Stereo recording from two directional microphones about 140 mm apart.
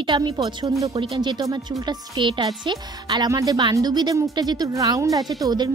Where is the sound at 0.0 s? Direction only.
35° right (ahead or behind).